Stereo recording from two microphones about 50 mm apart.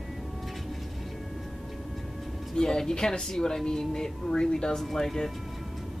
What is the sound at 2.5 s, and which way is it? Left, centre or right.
Speech, centre.